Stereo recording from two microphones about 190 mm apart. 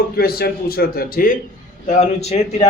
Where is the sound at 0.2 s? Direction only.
55° left (ahead or behind).